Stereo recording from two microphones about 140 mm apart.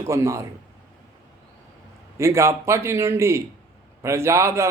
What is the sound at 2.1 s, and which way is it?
A man's voice, 20° right (ahead or behind).